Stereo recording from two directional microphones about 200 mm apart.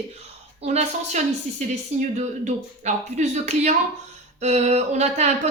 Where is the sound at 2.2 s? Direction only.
35° right (ahead or behind).